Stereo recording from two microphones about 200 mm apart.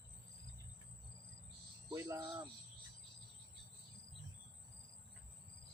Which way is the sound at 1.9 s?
15° right (ahead or behind).